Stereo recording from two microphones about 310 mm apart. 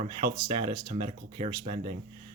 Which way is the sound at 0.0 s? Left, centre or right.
Centre.